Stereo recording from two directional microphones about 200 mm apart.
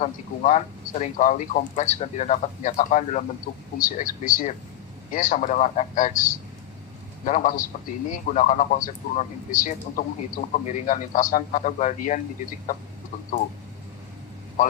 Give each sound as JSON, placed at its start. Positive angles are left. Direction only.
{"t": 0.0, "sound": "a man's voice", "side_deg": 35}
{"t": 7.3, "sound": "a man's voice", "side_deg": 40}